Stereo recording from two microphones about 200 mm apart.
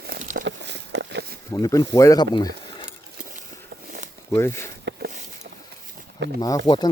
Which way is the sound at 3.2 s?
45° right (ahead or behind).